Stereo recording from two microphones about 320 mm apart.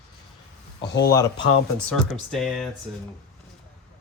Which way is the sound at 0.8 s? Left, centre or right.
Left.